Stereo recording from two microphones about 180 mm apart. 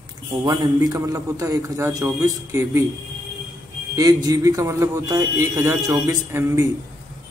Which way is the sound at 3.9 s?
20° right (ahead or behind).